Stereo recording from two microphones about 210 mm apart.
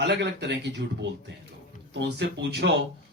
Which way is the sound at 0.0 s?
55° right (ahead or behind).